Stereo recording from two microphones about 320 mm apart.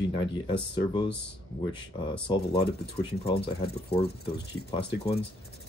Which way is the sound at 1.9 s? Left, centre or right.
Centre.